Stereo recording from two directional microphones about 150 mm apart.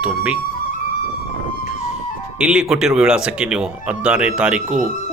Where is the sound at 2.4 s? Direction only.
5° right (ahead or behind).